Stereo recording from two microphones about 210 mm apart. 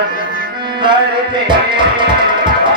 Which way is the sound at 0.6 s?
20° right (ahead or behind).